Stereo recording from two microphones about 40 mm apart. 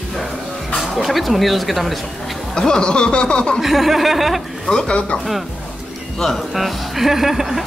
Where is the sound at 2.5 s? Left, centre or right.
Centre.